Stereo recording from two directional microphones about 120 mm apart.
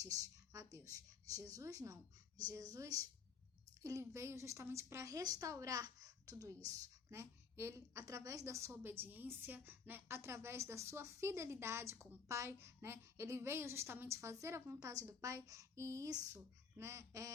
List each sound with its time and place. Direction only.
0.0 s a woman's voice: 30° right (ahead or behind)